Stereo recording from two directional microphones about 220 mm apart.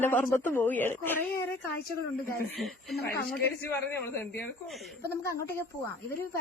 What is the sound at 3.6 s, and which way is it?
Speech, 10° left (ahead or behind).